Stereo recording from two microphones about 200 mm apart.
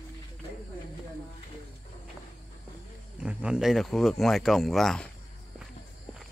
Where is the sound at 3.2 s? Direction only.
5° right (ahead or behind).